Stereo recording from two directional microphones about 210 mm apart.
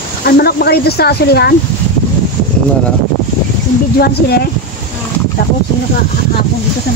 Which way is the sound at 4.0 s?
50° left (ahead or behind).